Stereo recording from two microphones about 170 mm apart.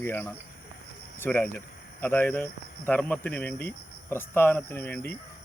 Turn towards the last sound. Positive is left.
turn(degrees=10)  # may be behind; listen again after turning